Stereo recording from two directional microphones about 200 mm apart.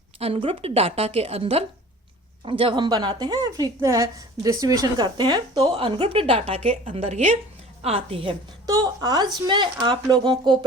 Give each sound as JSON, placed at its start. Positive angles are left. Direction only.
{"t": 0.2, "sound": "a woman's voice", "side_deg": -30}